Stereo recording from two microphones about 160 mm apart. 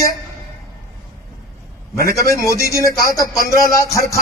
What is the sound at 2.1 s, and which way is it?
Speech, 20° left (ahead or behind).